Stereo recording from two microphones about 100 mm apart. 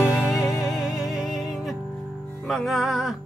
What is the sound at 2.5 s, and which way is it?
Music, centre (ahead or behind).